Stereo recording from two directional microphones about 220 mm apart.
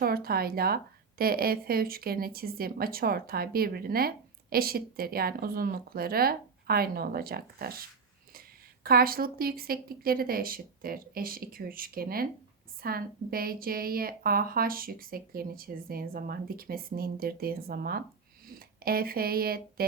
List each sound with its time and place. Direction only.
0.0 s a sound: 45° right (ahead or behind)
1.2 s a woman's voice: 45° right (ahead or behind)
8.8 s a woman's voice: 40° right (ahead or behind)